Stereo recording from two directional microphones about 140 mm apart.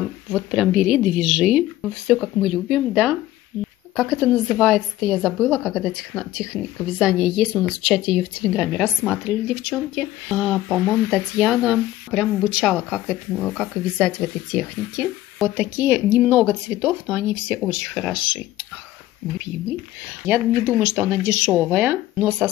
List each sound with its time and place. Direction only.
0.3 s speech: 5° right (ahead or behind)
20.2 s speech: 15° right (ahead or behind)